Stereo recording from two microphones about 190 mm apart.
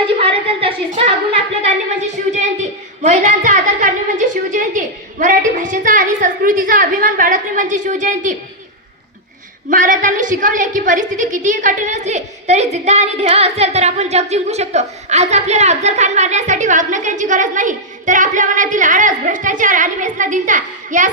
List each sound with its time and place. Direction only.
0.2 s a woman's voice: 30° right (ahead or behind)
3.0 s a woman's voice: 40° right (ahead or behind)
9.6 s a woman's voice: 45° right (ahead or behind)